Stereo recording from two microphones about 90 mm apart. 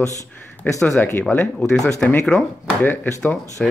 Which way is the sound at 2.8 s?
20° left (ahead or behind).